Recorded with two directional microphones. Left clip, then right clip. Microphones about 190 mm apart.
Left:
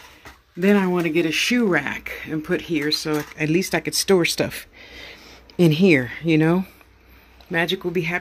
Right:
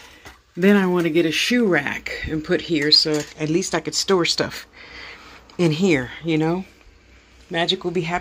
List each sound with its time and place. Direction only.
0.6 s speech: 15° right (ahead or behind)
0.8 s speech: centre (ahead or behind); by 3.3 s 15° left (ahead or behind)
3.3 s speech: 30° left (ahead or behind)
7.5 s speech: 20° left (ahead or behind)